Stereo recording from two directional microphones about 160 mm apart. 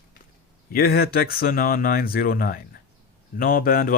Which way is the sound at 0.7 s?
70° left (ahead or behind).